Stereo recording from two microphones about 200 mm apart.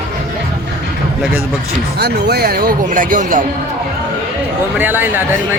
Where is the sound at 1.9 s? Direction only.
55° right (ahead or behind).